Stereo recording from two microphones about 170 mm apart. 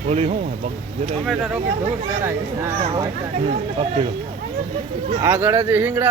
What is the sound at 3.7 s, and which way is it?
Speech, 35° right (ahead or behind).